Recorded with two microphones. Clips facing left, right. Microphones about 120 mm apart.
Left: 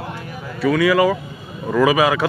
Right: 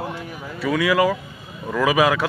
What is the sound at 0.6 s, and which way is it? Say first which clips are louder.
Speech: left 3 dB; 5° right (ahead or behind).